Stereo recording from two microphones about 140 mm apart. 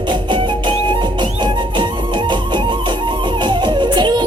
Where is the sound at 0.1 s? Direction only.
35° right (ahead or behind).